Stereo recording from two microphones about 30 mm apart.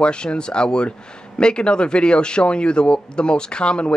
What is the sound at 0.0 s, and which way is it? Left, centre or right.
Speech, left.